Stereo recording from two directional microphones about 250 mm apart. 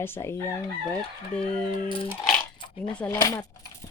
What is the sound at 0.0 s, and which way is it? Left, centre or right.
Chicken, centre.